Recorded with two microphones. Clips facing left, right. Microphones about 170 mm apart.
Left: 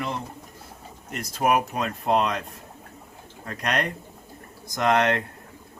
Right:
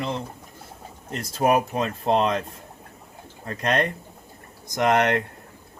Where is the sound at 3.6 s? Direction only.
25° right (ahead or behind).